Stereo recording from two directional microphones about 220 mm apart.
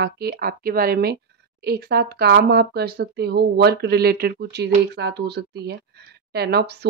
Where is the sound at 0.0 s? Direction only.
45° right (ahead or behind).